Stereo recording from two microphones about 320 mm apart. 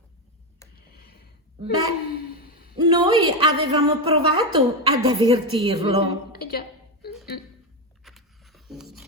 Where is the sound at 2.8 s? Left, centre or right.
Centre.